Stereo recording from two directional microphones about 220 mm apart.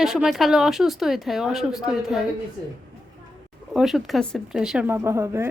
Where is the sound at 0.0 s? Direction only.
Centre (ahead or behind).